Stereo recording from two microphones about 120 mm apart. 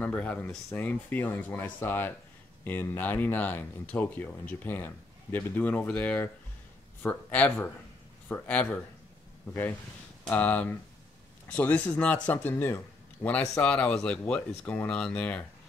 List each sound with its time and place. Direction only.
0.0 s speech: 10° left (ahead or behind)
10.2 s speech: 10° left (ahead or behind)